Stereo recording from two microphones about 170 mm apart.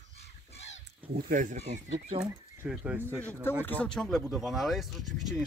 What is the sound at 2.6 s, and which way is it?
Speech, 5° right (ahead or behind).